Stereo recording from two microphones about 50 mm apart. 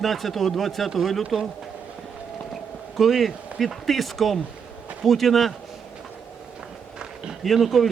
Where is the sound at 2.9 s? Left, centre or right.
Centre.